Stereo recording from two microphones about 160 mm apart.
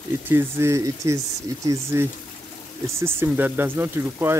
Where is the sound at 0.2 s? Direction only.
15° right (ahead or behind).